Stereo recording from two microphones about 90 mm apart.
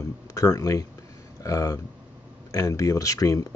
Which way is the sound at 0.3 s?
40° left (ahead or behind).